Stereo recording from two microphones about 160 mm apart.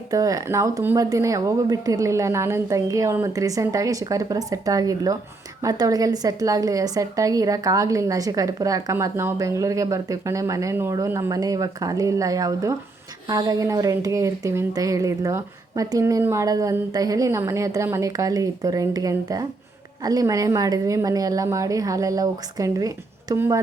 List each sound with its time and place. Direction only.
0.1 s a woman's voice: 20° right (ahead or behind)